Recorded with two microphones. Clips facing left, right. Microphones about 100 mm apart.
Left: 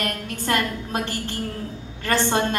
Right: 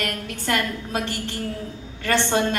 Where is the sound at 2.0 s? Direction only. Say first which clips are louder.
Even; 35° left (ahead or behind).